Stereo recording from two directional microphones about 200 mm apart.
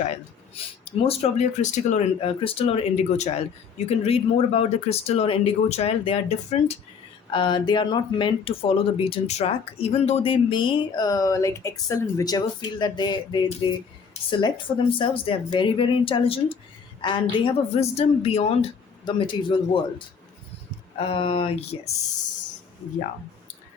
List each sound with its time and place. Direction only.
0.5 s speech: 30° left (ahead or behind)
21.0 s speech: 25° left (ahead or behind)